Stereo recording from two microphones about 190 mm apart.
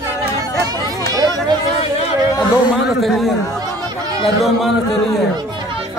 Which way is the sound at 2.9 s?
Centre (ahead or behind).